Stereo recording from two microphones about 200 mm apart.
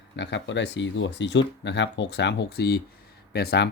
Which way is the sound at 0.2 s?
60° left (ahead or behind).